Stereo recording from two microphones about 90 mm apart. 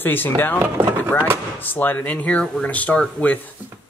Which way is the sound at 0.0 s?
20° left (ahead or behind).